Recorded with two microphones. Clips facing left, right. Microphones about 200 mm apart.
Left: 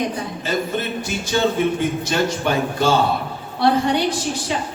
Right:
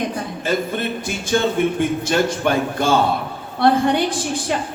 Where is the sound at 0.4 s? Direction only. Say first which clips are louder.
Right 2 dB; 50° right (ahead or behind).